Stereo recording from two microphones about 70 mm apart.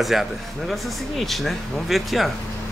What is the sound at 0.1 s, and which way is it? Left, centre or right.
Speech, centre.